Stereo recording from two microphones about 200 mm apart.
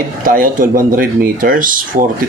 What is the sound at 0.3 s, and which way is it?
Speech, 45° right (ahead or behind).